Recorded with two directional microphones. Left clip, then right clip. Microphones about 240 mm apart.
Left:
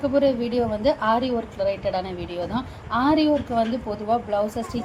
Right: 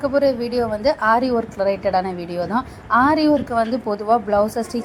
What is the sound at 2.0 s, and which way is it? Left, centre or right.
Speech, right.